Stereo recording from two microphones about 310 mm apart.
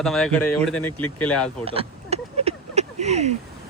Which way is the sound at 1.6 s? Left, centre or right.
Centre.